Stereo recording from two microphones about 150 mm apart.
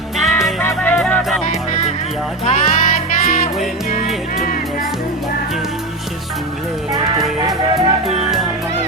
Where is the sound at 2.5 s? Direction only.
50° left (ahead or behind).